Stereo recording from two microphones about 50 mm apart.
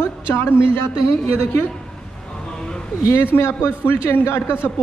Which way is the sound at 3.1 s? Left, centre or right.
Left.